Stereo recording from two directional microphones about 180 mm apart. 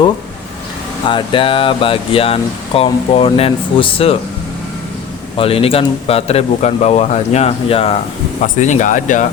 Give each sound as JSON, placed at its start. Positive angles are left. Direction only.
{"t": 1.0, "sound": "speech", "side_deg": 25}
{"t": 5.4, "sound": "speech", "side_deg": 30}